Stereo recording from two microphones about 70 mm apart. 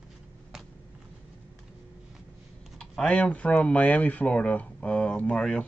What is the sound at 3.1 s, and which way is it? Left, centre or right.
Speech, centre.